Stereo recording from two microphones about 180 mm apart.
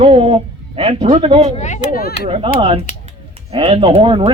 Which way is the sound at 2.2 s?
30° right (ahead or behind).